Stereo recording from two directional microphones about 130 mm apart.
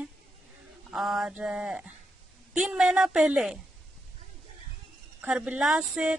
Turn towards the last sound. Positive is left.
turn(degrees=-5)  # may be behind; listen again after turning